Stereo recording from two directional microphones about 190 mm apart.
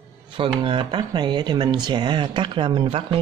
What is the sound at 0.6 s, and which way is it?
Speech, 25° right (ahead or behind).